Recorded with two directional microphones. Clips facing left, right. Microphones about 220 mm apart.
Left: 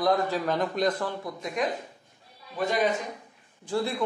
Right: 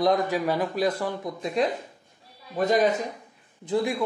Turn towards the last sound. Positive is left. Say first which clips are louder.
# right 3 dB
turn(degrees=-15)  # may be behind; listen again after turning